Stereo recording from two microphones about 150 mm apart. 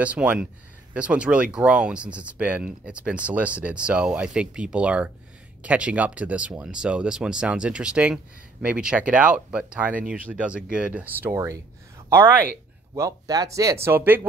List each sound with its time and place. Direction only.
0.0 s speech: 10° right (ahead or behind)